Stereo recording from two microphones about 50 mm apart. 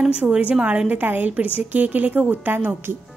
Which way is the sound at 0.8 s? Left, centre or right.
Right.